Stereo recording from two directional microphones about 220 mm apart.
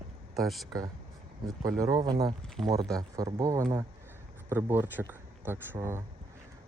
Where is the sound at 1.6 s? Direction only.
20° right (ahead or behind).